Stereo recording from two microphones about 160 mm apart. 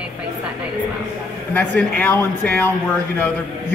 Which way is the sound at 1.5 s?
10° left (ahead or behind).